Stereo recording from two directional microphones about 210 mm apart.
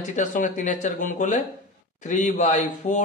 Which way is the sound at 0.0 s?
35° left (ahead or behind).